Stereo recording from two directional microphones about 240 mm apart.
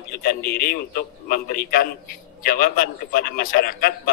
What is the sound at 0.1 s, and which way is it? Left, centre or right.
A man's voice, left.